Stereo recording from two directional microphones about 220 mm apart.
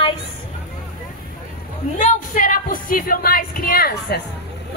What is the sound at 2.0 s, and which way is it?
A woman's voice, 35° left (ahead or behind).